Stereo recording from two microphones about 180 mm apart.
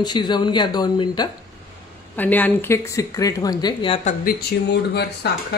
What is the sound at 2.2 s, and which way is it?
Speech, 10° left (ahead or behind).